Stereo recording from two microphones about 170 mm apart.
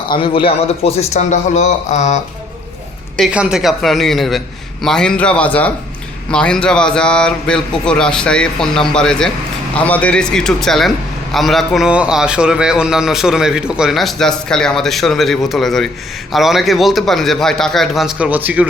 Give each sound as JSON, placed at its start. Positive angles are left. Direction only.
{"t": 0.1, "sound": "a man's voice", "side_deg": 30}
{"t": 3.2, "sound": "a man's voice", "side_deg": -5}